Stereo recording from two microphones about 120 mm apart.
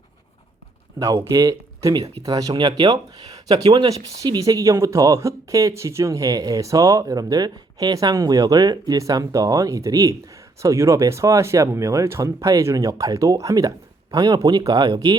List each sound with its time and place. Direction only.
0.9 s speech: 25° right (ahead or behind)